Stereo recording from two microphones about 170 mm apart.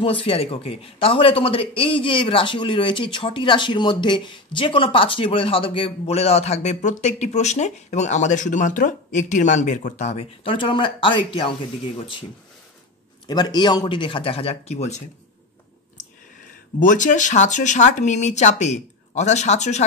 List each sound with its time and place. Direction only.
0.0 s speech: 35° left (ahead or behind)
13.3 s speech: 25° left (ahead or behind); by 15.0 s 40° left (ahead or behind)
16.8 s speech: 50° left (ahead or behind)